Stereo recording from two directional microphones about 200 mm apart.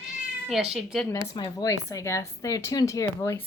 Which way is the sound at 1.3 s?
20° left (ahead or behind).